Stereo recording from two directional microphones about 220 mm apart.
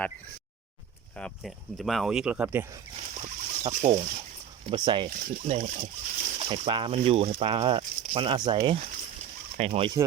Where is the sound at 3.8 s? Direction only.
30° right (ahead or behind).